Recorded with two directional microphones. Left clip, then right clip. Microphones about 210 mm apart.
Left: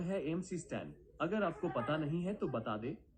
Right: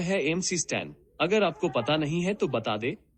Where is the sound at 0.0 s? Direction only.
55° right (ahead or behind).